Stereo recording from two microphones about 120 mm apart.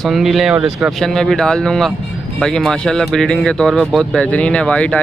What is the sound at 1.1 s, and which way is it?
Speech, 5° left (ahead or behind).